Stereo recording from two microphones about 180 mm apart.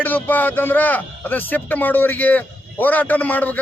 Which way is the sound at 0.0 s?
10° left (ahead or behind).